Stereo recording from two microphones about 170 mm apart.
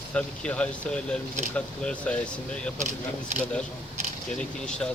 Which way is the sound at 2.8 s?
45° right (ahead or behind).